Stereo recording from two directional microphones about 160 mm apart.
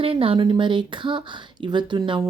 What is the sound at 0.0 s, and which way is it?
Speech, 35° right (ahead or behind).